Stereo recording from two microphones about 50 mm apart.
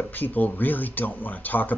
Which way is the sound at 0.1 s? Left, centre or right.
Left.